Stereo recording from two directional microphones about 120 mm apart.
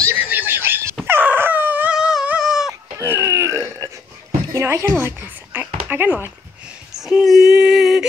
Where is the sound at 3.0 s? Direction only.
20° right (ahead or behind).